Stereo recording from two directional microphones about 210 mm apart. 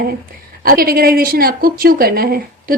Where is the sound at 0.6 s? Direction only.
45° right (ahead or behind).